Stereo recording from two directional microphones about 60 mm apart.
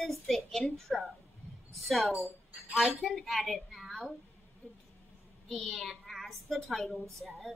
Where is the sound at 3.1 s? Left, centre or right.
Centre.